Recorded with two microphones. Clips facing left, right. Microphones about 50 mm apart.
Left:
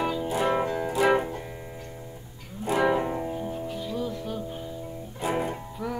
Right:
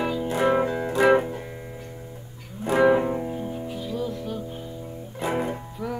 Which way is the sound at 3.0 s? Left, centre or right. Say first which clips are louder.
Right 2 dB; centre.